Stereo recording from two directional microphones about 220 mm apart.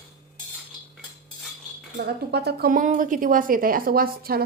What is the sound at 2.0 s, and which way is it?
A woman's voice, 50° right (ahead or behind).